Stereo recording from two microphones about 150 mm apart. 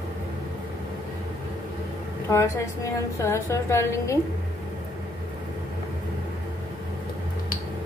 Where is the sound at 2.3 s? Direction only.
20° left (ahead or behind).